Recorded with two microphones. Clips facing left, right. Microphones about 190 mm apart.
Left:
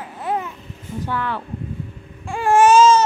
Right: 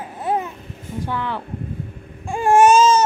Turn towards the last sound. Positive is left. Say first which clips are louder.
# left 1 dB
turn(degrees=-20)  # may be behind; listen again after turning